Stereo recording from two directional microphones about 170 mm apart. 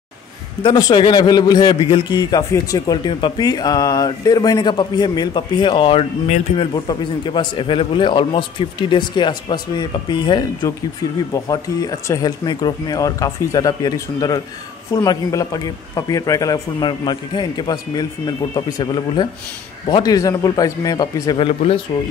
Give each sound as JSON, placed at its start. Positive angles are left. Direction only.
{"t": 0.6, "sound": "a man's voice", "side_deg": 25}